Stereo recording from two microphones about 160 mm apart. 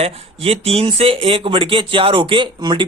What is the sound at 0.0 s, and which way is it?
Speech, 40° right (ahead or behind).